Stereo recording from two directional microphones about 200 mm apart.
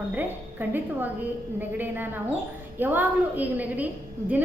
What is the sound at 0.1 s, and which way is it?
A woman's voice, 10° right (ahead or behind).